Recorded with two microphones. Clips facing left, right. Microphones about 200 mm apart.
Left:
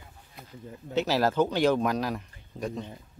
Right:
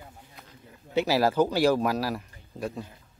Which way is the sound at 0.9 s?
10° right (ahead or behind).